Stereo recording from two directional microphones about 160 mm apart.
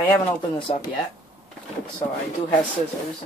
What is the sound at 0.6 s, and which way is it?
Speech, 30° left (ahead or behind).